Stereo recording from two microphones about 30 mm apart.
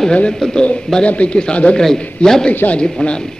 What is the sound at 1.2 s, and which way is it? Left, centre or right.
Speech, left.